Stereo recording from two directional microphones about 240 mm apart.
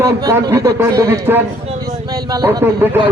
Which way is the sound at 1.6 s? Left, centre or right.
Right.